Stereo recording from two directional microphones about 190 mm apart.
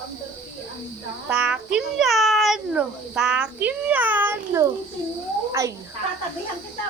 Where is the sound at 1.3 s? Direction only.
5° right (ahead or behind).